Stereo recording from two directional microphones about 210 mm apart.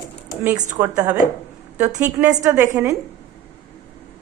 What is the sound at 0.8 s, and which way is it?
A woman's voice, 10° right (ahead or behind).